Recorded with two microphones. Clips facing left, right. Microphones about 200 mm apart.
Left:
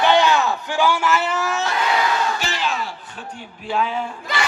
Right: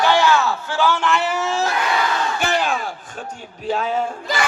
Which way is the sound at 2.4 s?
55° right (ahead or behind).